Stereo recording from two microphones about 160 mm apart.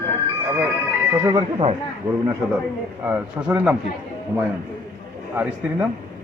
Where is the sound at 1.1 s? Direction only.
20° right (ahead or behind).